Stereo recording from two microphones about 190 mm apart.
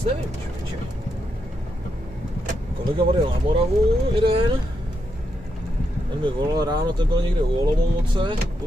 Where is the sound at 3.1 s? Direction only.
30° right (ahead or behind).